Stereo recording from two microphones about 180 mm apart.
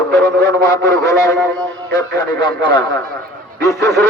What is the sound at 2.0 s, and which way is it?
A man's voice, 25° left (ahead or behind).